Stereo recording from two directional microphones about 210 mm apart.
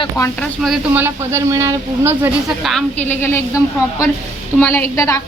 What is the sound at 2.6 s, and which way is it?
A child's voice, 5° left (ahead or behind).